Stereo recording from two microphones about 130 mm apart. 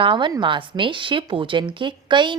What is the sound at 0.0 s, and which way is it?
Speech, 40° right (ahead or behind).